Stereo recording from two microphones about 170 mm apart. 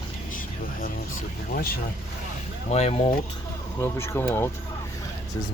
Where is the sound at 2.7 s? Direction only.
40° left (ahead or behind).